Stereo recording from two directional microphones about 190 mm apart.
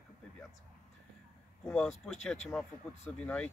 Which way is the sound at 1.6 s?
5° left (ahead or behind).